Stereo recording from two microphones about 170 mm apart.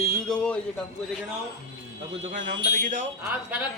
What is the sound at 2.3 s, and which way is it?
Speech, 50° right (ahead or behind).